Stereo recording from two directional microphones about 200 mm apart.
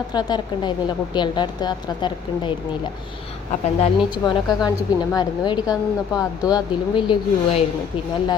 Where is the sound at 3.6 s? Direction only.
30° left (ahead or behind).